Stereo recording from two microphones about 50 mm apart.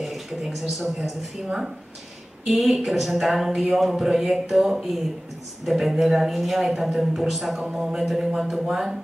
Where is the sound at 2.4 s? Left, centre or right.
Centre.